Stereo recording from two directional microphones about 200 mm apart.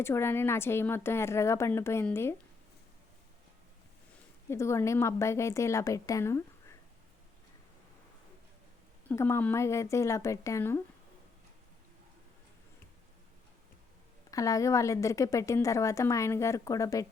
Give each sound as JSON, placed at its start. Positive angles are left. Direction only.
{"t": 0.0, "sound": "a woman's voice", "side_deg": 10}
{"t": 4.4, "sound": "a woman's voice", "side_deg": 15}
{"t": 9.0, "sound": "a woman's voice", "side_deg": 10}
{"t": 14.3, "sound": "a woman's voice", "side_deg": 15}